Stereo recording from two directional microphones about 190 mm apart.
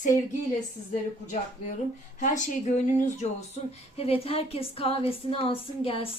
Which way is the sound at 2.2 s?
40° left (ahead or behind).